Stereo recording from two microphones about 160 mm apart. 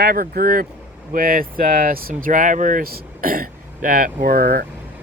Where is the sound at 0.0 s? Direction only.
65° right (ahead or behind).